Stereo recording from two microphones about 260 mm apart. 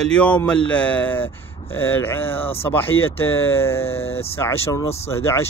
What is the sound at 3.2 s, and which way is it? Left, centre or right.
Speech, left.